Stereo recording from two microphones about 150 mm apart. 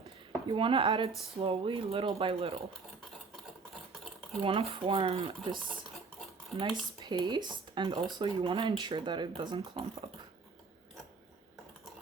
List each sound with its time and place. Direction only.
0.5 s speech: 35° right (ahead or behind)
4.4 s speech: 35° right (ahead or behind)
6.6 s speech: 30° right (ahead or behind)